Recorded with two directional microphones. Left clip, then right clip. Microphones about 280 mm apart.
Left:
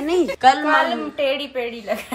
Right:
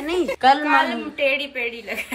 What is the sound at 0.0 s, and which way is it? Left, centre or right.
A woman's voice, centre.